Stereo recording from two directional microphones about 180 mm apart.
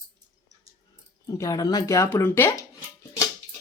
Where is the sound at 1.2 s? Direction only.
20° left (ahead or behind).